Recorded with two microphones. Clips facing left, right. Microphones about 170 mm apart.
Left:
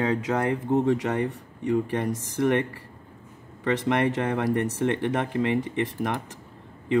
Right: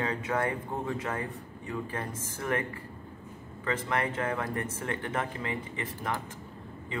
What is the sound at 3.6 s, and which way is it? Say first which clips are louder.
Speech: left 7 dB; 80° left.